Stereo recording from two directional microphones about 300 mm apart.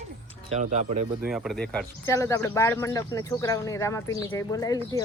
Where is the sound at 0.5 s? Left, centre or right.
Right.